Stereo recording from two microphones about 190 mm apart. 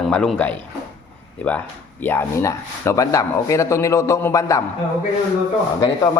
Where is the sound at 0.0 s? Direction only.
5° left (ahead or behind).